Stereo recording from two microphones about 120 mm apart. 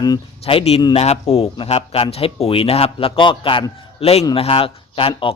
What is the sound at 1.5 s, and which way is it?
Speech, 45° left (ahead or behind).